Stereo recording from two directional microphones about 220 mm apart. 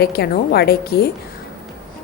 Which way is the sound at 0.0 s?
45° left (ahead or behind).